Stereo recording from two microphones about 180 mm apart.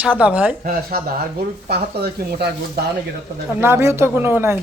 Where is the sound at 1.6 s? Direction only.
65° right (ahead or behind).